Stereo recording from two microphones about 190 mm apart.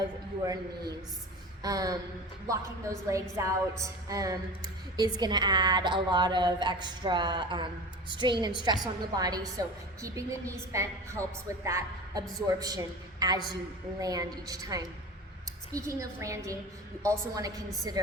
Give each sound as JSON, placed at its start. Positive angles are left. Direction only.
{"t": 0.4, "sound": "a woman's voice", "side_deg": -20}